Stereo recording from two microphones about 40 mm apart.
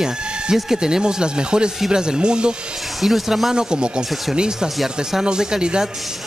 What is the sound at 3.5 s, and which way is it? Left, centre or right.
A man's voice, centre.